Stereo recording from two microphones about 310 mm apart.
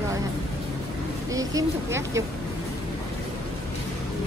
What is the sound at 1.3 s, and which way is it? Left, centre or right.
Speech, centre.